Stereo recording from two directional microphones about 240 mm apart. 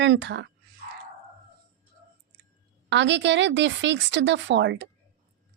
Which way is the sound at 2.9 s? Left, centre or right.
Right.